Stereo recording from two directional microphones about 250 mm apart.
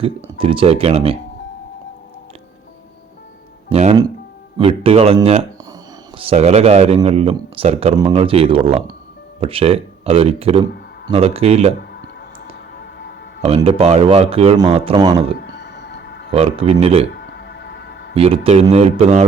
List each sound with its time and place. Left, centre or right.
0.0 s speech: right
3.7 s speech: right
6.1 s speech: right
12.7 s music: left
13.6 s speech: right
15.4 s music: left
16.3 s speech: right
17.1 s music: left
18.1 s speech: right